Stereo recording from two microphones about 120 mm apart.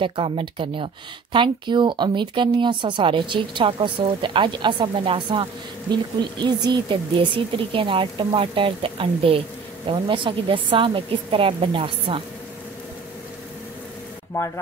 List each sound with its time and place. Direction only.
0.0 s speech: 45° right (ahead or behind)